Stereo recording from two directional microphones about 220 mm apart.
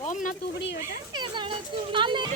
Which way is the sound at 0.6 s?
50° left (ahead or behind).